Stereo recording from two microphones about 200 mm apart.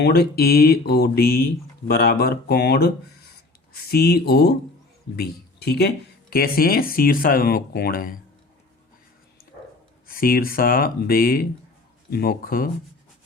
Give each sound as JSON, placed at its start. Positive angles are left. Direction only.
{"t": 0.0, "sound": "speech", "side_deg": 50}
{"t": 10.1, "sound": "speech", "side_deg": 45}